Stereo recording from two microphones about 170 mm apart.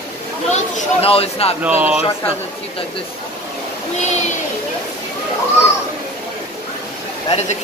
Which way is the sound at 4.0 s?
45° left (ahead or behind).